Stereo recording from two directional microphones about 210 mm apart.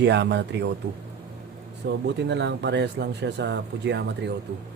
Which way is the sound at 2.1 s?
55° right (ahead or behind).